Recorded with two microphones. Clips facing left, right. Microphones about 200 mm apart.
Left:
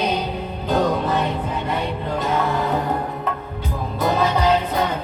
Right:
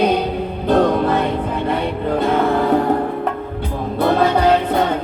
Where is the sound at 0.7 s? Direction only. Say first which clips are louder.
Right 5 dB; 55° right (ahead or behind).